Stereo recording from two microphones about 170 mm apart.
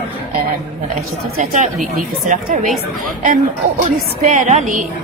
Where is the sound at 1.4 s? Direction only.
50° right (ahead or behind).